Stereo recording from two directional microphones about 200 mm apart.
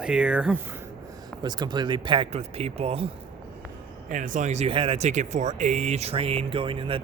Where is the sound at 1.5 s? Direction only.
20° right (ahead or behind).